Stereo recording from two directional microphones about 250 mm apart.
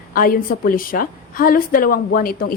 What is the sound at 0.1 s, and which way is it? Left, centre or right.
A woman's voice, left.